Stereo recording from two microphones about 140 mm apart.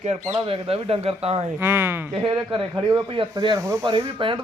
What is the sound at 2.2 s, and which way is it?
Speech, 35° right (ahead or behind).